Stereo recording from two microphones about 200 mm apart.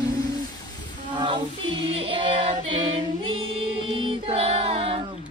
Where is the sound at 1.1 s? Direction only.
20° right (ahead or behind).